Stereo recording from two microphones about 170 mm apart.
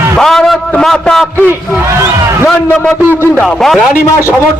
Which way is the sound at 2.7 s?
10° left (ahead or behind).